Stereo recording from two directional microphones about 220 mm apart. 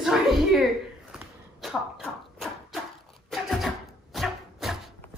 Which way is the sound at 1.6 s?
Centre (ahead or behind).